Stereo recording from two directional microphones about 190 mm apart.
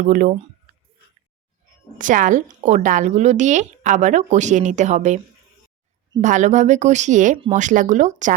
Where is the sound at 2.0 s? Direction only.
45° right (ahead or behind).